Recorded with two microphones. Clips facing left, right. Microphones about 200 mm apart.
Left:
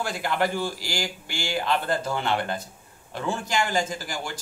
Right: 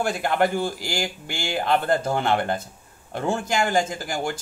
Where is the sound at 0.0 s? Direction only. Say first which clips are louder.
Right 4 dB; 55° right (ahead or behind).